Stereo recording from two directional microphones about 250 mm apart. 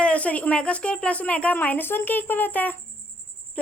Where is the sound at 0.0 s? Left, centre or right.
Centre.